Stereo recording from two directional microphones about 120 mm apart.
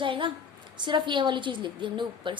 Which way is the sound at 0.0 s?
45° right (ahead or behind).